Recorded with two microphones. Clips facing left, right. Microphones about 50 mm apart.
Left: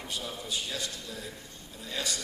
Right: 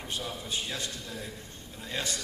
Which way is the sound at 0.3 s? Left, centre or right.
Right.